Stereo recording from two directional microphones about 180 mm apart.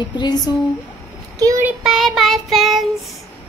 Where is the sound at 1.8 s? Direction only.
Centre (ahead or behind).